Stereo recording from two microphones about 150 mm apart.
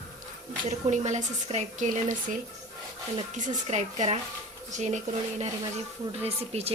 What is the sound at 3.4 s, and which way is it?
A woman's voice, 55° right (ahead or behind).